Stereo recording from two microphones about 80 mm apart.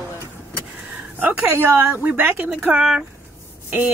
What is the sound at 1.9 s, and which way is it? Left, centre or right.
Speech, centre.